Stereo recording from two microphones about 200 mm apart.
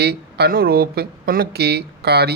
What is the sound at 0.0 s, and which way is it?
Speech, 55° right (ahead or behind).